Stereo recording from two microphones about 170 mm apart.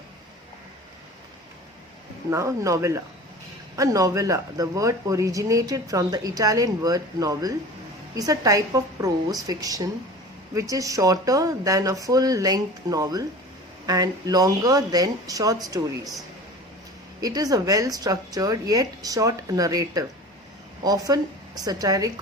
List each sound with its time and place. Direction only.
2.3 s speech: 15° right (ahead or behind)
17.2 s speech: 20° right (ahead or behind)